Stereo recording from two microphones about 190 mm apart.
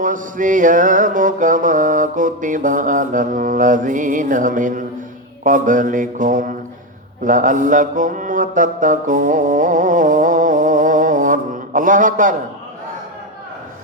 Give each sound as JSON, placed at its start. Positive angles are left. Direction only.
{"t": 0.0, "sound": "mantra", "side_deg": -45}